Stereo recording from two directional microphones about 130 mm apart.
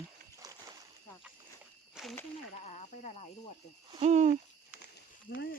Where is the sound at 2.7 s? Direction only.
65° left (ahead or behind).